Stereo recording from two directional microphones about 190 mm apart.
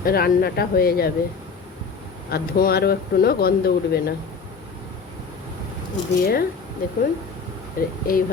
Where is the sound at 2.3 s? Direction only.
55° left (ahead or behind).